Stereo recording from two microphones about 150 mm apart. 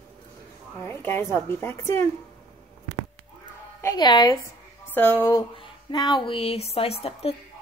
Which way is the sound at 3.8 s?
30° left (ahead or behind).